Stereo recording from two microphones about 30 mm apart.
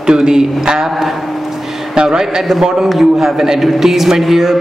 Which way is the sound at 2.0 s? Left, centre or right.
Right.